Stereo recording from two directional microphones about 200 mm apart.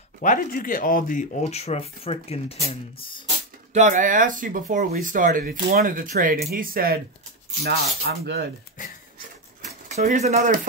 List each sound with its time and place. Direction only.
0.2 s speech: 45° left (ahead or behind); by 3.3 s 25° left (ahead or behind)
3.7 s speech: 40° right (ahead or behind); by 8.5 s 55° right (ahead or behind)
9.8 s speech: 35° right (ahead or behind)